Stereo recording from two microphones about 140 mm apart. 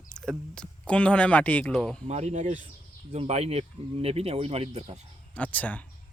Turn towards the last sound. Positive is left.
turn(degrees=10)  # may be behind; listen again after turning